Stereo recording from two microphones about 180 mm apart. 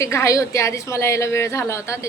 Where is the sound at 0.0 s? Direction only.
15° left (ahead or behind).